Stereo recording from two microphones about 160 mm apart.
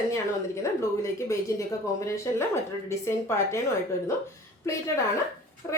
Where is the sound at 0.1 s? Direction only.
20° left (ahead or behind).